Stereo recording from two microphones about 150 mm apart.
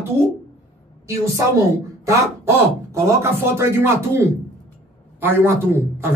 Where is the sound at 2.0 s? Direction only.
20° right (ahead or behind).